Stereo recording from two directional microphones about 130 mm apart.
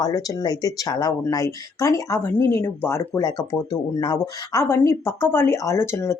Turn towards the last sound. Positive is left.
turn(degrees=20)  # may be behind; listen again after turning